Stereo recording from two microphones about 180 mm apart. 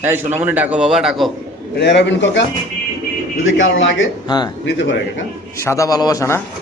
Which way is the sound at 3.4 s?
90° left.